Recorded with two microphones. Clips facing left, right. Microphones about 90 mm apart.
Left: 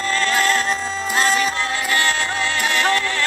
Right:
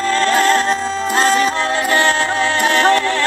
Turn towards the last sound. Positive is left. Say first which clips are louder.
# right 6 dB
turn(degrees=-25)  # may be behind; listen again after turning